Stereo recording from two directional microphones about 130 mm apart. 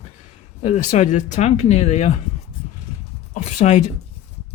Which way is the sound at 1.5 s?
60° left (ahead or behind).